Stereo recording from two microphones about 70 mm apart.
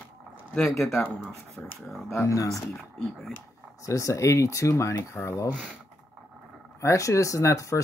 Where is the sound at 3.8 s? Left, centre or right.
Left.